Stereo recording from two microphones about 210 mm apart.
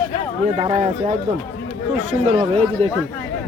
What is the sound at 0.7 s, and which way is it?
Speech, 35° right (ahead or behind).